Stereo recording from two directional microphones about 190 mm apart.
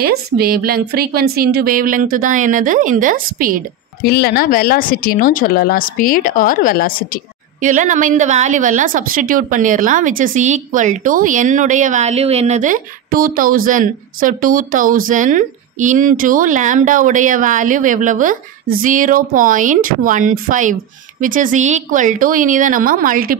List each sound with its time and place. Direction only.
0.0 s a woman's voice: 55° right (ahead or behind)
4.0 s speech: 55° left (ahead or behind)
7.6 s a woman's voice: 40° right (ahead or behind)